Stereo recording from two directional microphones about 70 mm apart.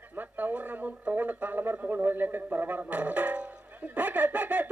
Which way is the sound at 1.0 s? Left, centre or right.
Right.